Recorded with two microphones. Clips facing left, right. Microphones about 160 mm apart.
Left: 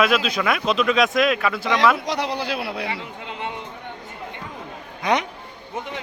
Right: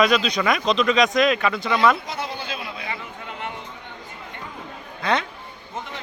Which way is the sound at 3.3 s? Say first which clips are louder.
Left 2 dB; 20° left (ahead or behind).